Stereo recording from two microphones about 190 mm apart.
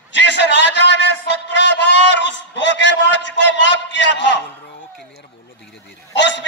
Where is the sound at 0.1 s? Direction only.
65° left (ahead or behind).